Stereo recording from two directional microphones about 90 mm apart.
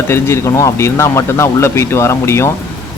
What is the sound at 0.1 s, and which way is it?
Speech, 30° left (ahead or behind).